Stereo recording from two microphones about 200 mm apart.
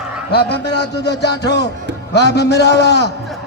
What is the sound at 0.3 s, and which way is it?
A man's voice, 55° left (ahead or behind).